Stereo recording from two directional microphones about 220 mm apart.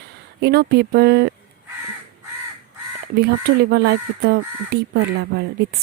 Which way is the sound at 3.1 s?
45° right (ahead or behind).